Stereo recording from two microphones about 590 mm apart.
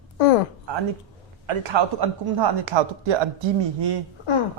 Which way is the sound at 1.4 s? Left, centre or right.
Right.